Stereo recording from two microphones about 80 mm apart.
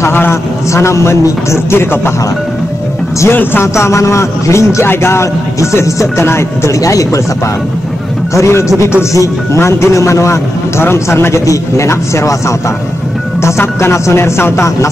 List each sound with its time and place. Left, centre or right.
0.0 s a sound: left
0.7 s a man's voice: left
3.3 s a man's voice: left
8.4 s a man's voice: left